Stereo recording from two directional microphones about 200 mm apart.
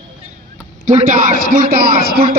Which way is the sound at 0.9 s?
40° right (ahead or behind).